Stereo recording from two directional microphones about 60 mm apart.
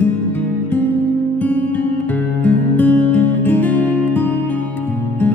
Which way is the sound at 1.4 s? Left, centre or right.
Left.